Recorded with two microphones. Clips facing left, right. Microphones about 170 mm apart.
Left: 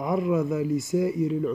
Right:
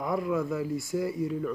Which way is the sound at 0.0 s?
20° left (ahead or behind).